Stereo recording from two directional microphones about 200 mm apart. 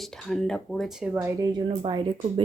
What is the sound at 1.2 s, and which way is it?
Speech, 20° right (ahead or behind).